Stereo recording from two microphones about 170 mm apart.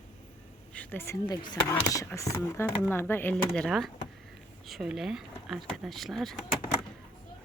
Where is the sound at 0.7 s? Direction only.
10° left (ahead or behind).